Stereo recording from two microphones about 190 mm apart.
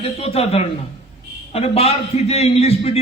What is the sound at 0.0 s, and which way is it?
A man's voice, 30° left (ahead or behind).